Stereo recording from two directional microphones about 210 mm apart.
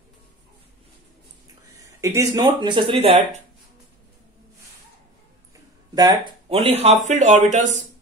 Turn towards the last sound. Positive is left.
turn(degrees=-35)  # may be behind; listen again after turning